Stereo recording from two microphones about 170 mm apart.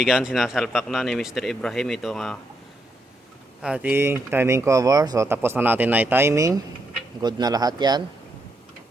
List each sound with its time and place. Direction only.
0.0 s speech: 5° right (ahead or behind)
3.6 s speech: 5° right (ahead or behind); by 8.0 s 25° right (ahead or behind)